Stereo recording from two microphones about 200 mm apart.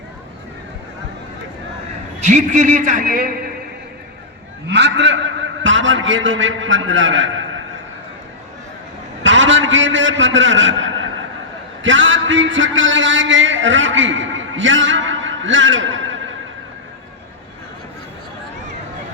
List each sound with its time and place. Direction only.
2.2 s a man's voice: 40° right (ahead or behind)
4.7 s a man's voice: 60° right (ahead or behind)
9.2 s a man's voice: 70° right (ahead or behind)
11.8 s a sound: 70° right (ahead or behind)